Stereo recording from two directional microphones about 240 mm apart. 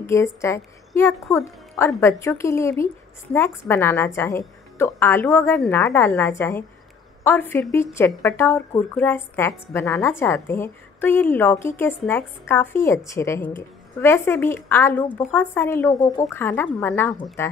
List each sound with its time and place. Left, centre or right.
0.0 s speech: centre